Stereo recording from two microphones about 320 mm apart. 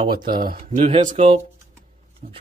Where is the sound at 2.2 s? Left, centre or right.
Right.